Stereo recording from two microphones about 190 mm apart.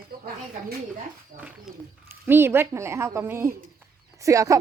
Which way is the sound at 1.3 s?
50° right (ahead or behind).